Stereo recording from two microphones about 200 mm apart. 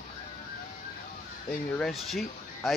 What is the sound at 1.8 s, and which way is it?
Speech, centre (ahead or behind).